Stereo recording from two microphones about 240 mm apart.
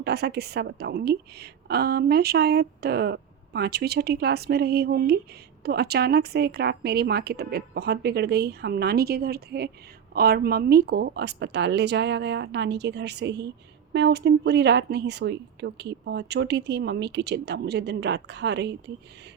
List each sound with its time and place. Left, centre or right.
0.0 s a woman's voice: right